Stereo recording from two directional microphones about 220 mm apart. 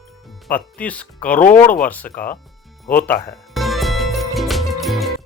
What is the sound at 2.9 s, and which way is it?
Music, 10° left (ahead or behind).